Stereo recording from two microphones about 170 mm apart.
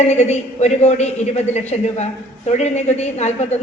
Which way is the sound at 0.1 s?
40° left (ahead or behind).